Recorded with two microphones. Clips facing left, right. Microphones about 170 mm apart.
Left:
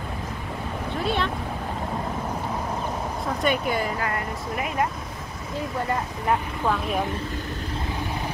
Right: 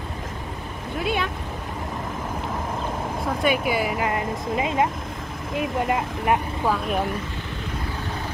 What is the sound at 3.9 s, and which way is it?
Speech, 20° right (ahead or behind).